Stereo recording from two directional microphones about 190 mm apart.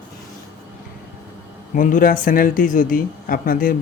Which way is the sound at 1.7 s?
45° left (ahead or behind).